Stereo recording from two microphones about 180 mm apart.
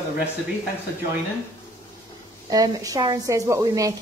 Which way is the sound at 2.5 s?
20° right (ahead or behind).